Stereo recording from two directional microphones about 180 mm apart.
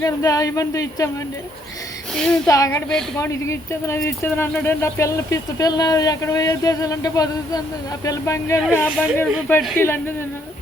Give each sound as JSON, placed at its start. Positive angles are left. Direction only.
{"t": 0.0, "sound": "speech", "side_deg": 20}
{"t": 2.1, "sound": "a woman's voice", "side_deg": 5}
{"t": 2.5, "sound": "speech", "side_deg": 15}